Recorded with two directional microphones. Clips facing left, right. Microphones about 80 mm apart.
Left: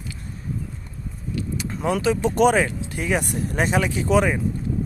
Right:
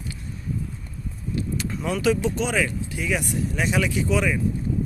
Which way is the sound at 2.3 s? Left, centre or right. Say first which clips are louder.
Left 7 dB; left.